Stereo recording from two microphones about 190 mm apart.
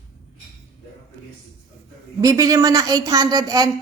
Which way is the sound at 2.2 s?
20° right (ahead or behind).